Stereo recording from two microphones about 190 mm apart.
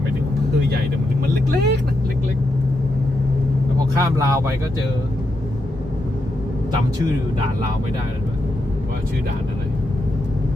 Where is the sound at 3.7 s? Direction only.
15° right (ahead or behind).